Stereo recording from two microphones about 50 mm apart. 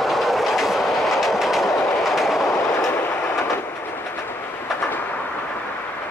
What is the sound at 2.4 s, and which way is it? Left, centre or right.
Train, left.